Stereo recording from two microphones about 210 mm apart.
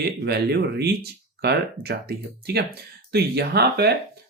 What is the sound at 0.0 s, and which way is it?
Speech, 50° right (ahead or behind).